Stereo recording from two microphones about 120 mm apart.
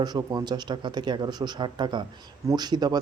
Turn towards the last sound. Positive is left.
turn(degrees=-35)  # may be behind; listen again after turning